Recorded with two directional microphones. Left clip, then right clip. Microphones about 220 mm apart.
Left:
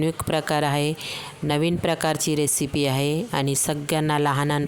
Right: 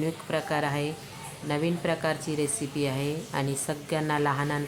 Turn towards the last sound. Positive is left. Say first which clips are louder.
# left 5 dB
turn(degrees=50)  # may be behind; listen again after turning